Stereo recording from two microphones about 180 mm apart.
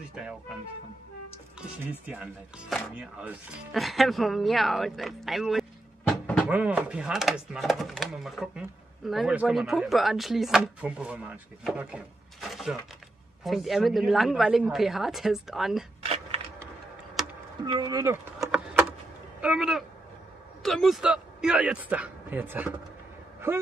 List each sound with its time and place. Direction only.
0.1 s speech: 5° right (ahead or behind)
2.0 s speech: 5° right (ahead or behind)
6.5 s speech: 5° right (ahead or behind)
17.6 s speech: 20° right (ahead or behind)
18.5 s a sound: 5° right (ahead or behind)
19.4 s speech: 5° right (ahead or behind)